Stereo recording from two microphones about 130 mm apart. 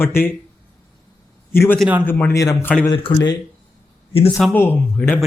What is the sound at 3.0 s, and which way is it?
Speech, 35° left (ahead or behind).